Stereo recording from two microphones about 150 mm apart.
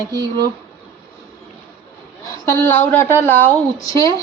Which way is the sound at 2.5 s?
15° left (ahead or behind).